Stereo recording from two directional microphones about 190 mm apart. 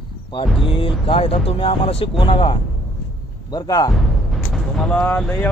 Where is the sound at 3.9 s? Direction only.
Centre (ahead or behind).